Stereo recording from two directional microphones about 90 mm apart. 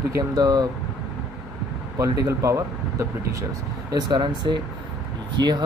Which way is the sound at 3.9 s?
55° right (ahead or behind).